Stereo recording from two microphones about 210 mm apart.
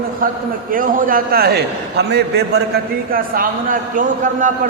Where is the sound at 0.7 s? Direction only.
40° right (ahead or behind).